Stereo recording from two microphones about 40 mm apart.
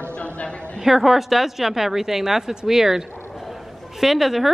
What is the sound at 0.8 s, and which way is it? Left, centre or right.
A woman's voice, centre.